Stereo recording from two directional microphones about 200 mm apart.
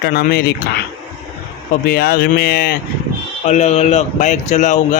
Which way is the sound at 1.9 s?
50° left (ahead or behind).